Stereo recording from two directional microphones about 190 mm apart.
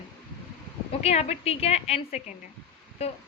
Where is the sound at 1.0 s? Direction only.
35° left (ahead or behind).